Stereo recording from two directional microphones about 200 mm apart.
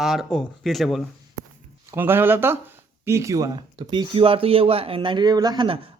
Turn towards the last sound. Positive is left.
turn(degrees=-25)  # may be behind; listen again after turning